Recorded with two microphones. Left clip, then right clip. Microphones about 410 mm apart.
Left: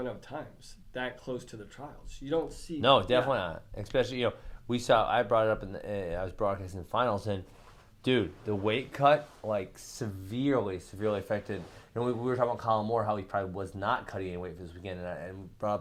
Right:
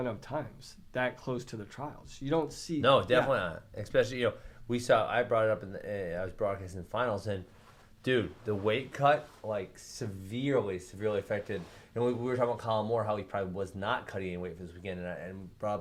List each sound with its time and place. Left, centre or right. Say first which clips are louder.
0.0 s speech: right 2 dB; right
2.8 s speech: left 1 dB; centre
9.5 s speech: left 3 dB; left